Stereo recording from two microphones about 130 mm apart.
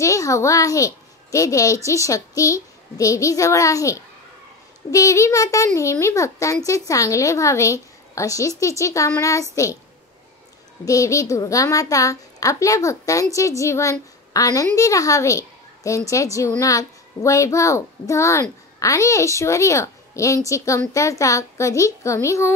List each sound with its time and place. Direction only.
0.0 s a child's voice: 25° left (ahead or behind)
10.9 s speech: 25° left (ahead or behind)